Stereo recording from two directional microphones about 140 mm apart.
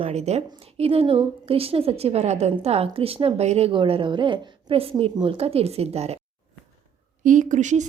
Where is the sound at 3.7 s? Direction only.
35° right (ahead or behind).